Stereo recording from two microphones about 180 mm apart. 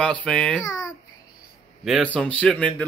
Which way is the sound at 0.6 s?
20° left (ahead or behind).